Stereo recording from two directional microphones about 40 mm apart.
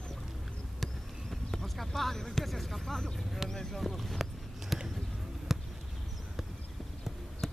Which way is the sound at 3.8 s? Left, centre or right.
Centre.